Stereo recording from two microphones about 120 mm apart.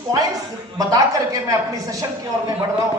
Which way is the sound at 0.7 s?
30° right (ahead or behind).